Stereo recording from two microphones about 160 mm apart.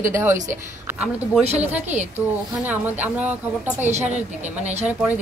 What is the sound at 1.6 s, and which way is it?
A woman's voice, 10° right (ahead or behind).